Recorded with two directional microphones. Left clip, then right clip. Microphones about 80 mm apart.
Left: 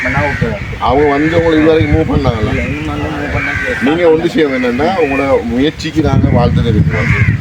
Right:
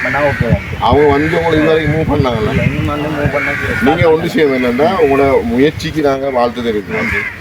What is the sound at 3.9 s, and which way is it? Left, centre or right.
Speech, right.